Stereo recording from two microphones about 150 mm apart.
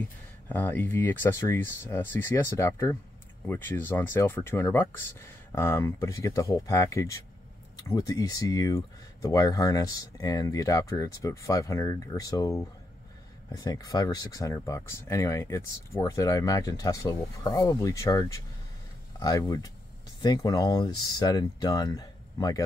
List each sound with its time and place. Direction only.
0.5 s speech: 10° left (ahead or behind)